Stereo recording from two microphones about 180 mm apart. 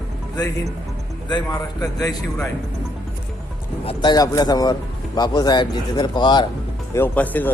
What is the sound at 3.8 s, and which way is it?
Speech, 25° left (ahead or behind).